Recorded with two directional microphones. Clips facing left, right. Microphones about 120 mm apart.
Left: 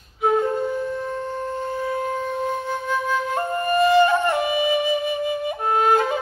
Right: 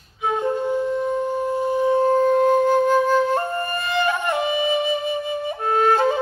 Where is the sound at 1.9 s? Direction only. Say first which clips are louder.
Right 9 dB; 35° right (ahead or behind).